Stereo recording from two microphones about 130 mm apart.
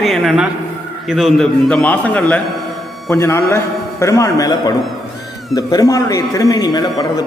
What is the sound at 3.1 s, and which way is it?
A man's voice, 20° left (ahead or behind).